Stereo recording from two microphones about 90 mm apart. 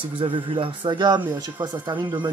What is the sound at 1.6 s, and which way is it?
Speech, 45° right (ahead or behind).